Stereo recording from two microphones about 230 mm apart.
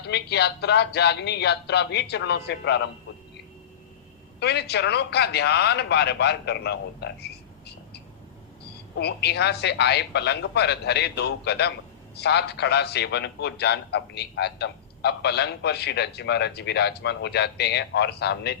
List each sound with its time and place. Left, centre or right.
0.1 s a man's voice: left
4.4 s a man's voice: left
9.0 s a man's voice: left